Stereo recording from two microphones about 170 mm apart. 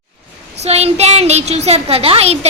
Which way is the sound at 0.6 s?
40° right (ahead or behind).